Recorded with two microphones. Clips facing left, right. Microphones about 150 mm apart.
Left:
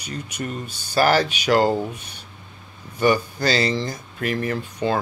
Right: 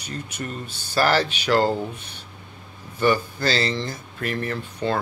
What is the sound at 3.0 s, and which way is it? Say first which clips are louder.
A man's voice: left 2 dB; 10° left (ahead or behind).